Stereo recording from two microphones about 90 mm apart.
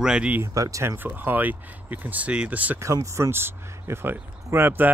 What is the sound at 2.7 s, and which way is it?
Speech, 35° right (ahead or behind).